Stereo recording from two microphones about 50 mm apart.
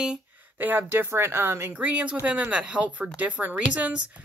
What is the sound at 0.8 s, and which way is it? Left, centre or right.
Speech, right.